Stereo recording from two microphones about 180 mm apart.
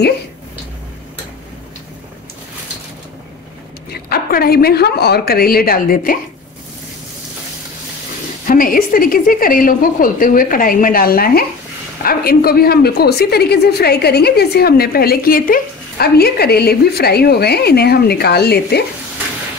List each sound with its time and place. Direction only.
4.1 s a woman's voice: 55° left (ahead or behind)
8.5 s a woman's voice: 50° left (ahead or behind)